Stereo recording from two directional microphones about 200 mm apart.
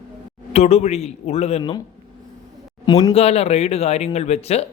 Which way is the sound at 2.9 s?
20° left (ahead or behind).